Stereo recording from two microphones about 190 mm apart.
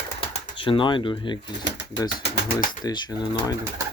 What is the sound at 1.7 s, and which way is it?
Speech, 70° left (ahead or behind).